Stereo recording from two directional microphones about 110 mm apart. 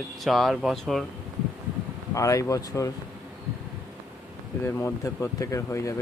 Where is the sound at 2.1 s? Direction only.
30° left (ahead or behind).